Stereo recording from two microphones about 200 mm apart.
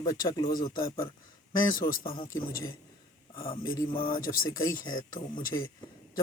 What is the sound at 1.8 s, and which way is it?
A man's voice, 20° left (ahead or behind).